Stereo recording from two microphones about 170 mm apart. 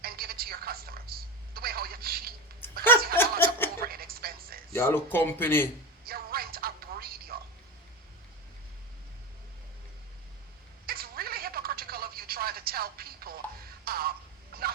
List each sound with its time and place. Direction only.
0.0 s telephone: 60° right (ahead or behind)
3.2 s snicker: 15° left (ahead or behind)
3.8 s music: 60° right (ahead or behind)
4.7 s speech: 15° left (ahead or behind)
6.1 s music: 60° right (ahead or behind)
10.8 s telephone: 60° right (ahead or behind)
14.5 s fowl: 60° right (ahead or behind)